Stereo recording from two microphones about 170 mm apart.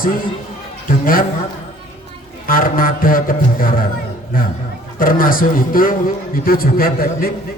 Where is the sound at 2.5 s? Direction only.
55° left (ahead or behind).